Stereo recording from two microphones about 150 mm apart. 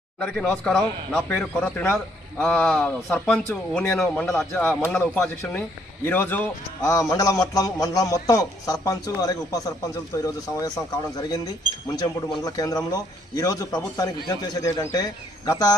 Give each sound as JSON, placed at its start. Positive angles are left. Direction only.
{"t": 0.2, "sound": "speech", "side_deg": 0}
{"t": 5.4, "sound": "a man's voice", "side_deg": 15}